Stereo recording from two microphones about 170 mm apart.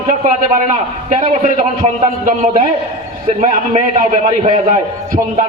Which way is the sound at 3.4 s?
45° right (ahead or behind).